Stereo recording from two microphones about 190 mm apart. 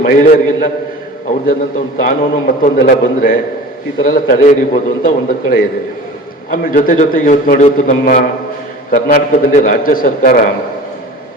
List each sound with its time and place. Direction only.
0.0 s a man's voice: 50° left (ahead or behind)
2.0 s a man's voice: 50° left (ahead or behind)